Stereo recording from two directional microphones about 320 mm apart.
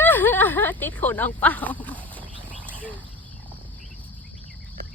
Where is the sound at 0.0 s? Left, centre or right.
Centre.